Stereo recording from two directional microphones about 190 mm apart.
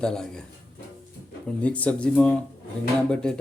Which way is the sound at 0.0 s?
5° left (ahead or behind).